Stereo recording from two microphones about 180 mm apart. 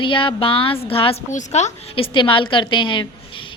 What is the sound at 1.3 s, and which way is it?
A woman's voice, 40° left (ahead or behind).